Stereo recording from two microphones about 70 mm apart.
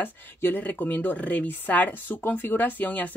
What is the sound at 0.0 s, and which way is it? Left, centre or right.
A woman's voice, left.